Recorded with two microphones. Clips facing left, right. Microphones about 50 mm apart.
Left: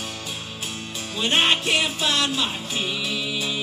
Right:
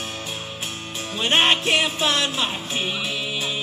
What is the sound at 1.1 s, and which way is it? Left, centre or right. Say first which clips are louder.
Music: right 2 dB; right.